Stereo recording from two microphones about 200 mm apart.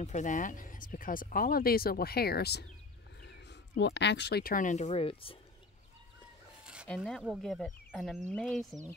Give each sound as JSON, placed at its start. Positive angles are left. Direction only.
{"t": 0.0, "sound": "speech", "side_deg": 35}
{"t": 6.6, "sound": "chicken", "side_deg": -5}
{"t": 7.0, "sound": "speech", "side_deg": 0}